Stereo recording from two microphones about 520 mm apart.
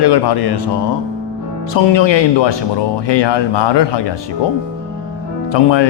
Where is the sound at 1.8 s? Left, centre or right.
Left.